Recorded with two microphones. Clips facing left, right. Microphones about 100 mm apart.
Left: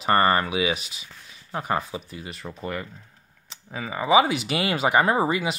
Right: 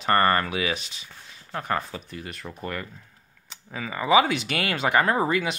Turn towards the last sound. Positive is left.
turn(degrees=10)  # may be behind; listen again after turning